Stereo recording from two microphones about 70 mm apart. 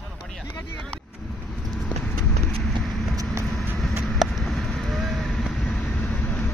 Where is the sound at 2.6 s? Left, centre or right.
Centre.